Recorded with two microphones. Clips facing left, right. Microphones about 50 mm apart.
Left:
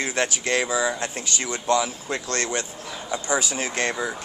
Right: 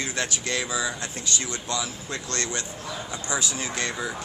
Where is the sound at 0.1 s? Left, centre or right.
Left.